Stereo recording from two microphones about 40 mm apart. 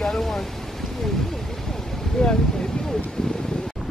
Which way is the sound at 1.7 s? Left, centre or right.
Centre.